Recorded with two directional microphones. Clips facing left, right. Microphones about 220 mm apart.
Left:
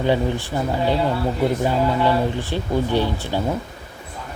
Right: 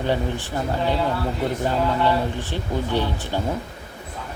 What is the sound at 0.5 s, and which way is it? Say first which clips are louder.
Speech: left 2 dB; 15° left (ahead or behind).